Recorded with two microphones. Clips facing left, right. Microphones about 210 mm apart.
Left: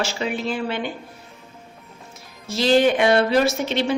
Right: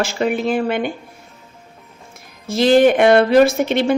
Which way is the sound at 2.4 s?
55° right (ahead or behind).